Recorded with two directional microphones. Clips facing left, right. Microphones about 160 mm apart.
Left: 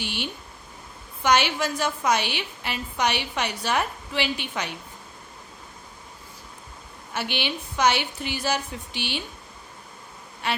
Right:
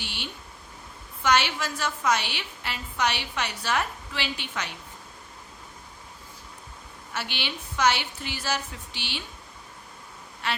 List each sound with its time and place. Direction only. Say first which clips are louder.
0.0 s a sound: left 7 dB; 15° left (ahead or behind)
1.2 s a woman's voice: left 3 dB; 15° left (ahead or behind)
7.1 s a woman's voice: left 5 dB; 15° left (ahead or behind)
10.4 s a woman's voice: left 3 dB; 15° left (ahead or behind)